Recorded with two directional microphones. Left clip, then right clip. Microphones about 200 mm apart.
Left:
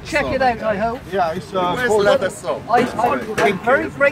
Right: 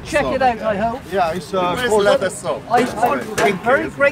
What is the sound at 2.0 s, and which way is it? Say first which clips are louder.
Speech: even; 5° right (ahead or behind).